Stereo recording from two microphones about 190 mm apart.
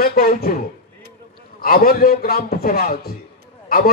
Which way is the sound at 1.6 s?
50° left (ahead or behind).